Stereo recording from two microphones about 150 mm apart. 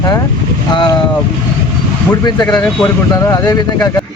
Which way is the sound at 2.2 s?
25° left (ahead or behind).